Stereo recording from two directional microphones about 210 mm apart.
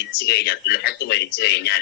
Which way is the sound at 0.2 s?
50° left (ahead or behind).